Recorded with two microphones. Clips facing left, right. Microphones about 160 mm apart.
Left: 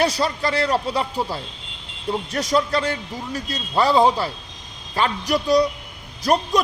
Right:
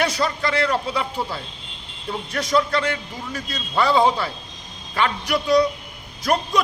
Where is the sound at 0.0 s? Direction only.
35° left (ahead or behind).